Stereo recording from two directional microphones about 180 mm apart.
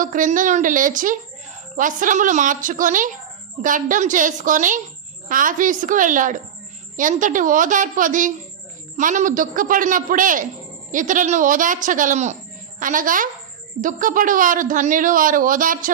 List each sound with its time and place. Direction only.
0.0 s speech: 45° right (ahead or behind)